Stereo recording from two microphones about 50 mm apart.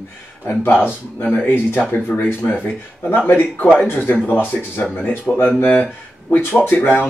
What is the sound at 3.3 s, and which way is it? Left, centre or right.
Speech, left.